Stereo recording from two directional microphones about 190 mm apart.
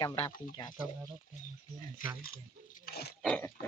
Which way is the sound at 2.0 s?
50° left (ahead or behind).